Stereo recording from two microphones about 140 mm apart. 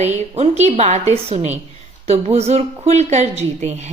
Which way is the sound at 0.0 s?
50° right (ahead or behind).